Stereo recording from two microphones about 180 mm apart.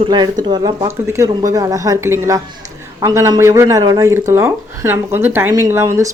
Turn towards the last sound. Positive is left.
turn(degrees=-15)  # may be behind; listen again after turning